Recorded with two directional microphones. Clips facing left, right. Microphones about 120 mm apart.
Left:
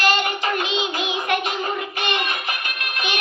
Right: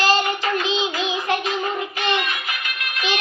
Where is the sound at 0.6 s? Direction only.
30° right (ahead or behind).